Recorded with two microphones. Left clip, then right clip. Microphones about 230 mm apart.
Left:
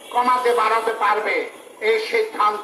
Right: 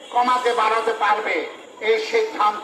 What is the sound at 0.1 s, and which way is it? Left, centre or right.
Speech, left.